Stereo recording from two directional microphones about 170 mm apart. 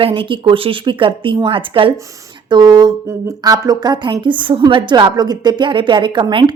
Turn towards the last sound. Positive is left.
turn(degrees=-25)  # may be behind; listen again after turning